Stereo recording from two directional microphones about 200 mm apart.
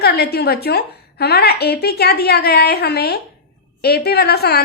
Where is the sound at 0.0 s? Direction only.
50° left (ahead or behind).